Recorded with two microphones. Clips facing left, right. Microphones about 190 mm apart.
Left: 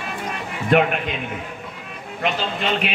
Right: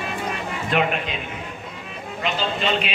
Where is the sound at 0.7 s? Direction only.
55° left (ahead or behind).